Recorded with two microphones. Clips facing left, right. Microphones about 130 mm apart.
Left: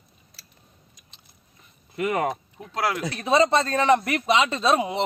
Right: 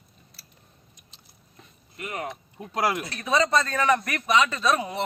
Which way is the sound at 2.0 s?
90° left.